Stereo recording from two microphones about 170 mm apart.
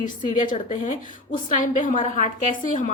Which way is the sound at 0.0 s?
50° left (ahead or behind).